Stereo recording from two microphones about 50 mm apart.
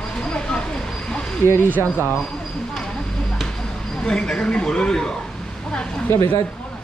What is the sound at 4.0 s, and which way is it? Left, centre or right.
Speech, centre.